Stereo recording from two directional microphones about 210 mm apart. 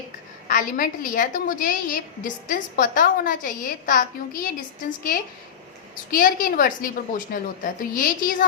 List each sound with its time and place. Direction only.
0.4 s a woman's voice: 40° left (ahead or behind)